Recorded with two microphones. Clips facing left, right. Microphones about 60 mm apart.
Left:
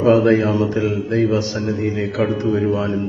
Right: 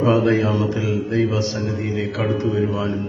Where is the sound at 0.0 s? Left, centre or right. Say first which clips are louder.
Left 3 dB; left.